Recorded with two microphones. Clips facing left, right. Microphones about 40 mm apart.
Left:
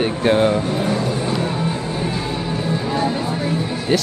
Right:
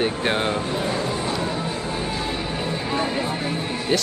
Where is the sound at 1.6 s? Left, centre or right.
Left.